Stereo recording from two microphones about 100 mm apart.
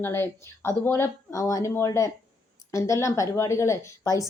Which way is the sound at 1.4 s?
35° left (ahead or behind).